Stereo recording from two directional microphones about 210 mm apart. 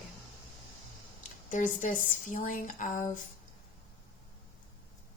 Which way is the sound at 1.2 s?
35° left (ahead or behind).